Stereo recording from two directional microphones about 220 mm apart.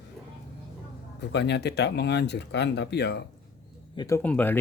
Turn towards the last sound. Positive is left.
turn(degrees=5)  # may be behind; listen again after turning